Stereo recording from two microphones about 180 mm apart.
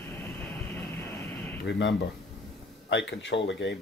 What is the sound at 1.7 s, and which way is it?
Speech, 85° left.